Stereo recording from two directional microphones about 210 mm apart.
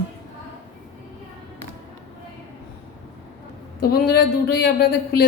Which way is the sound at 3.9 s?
50° left (ahead or behind).